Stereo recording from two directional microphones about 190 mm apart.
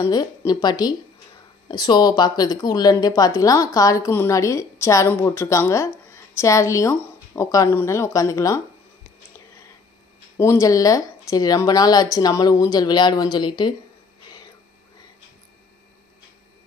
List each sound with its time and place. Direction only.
0.0 s a woman's voice: 15° left (ahead or behind)
10.3 s speech: 15° left (ahead or behind)